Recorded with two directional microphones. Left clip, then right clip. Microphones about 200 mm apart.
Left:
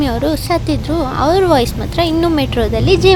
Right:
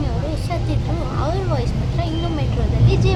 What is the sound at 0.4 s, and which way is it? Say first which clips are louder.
Speech: left 10 dB; 40° left (ahead or behind).